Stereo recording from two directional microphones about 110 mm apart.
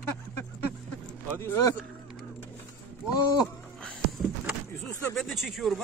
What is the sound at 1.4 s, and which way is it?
Speech, 20° left (ahead or behind).